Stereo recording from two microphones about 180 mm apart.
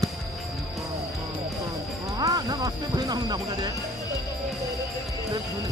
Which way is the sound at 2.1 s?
20° right (ahead or behind).